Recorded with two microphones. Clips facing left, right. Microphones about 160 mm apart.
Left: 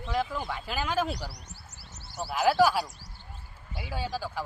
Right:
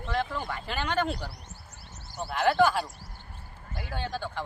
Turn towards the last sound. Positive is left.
turn(degrees=5)  # may be behind; listen again after turning